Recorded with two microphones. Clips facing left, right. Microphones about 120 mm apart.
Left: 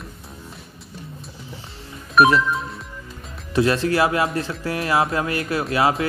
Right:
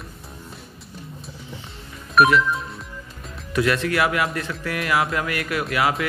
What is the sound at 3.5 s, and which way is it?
A man's voice, 30° left (ahead or behind).